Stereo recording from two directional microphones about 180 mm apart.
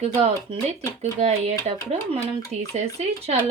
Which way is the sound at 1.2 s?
35° right (ahead or behind).